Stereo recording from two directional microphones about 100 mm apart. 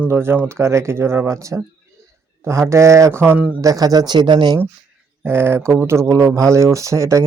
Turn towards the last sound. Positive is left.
turn(degrees=-30)  # may be behind; listen again after turning